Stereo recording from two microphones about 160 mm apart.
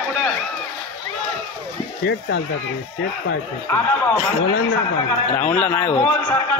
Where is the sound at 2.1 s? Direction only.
90° left.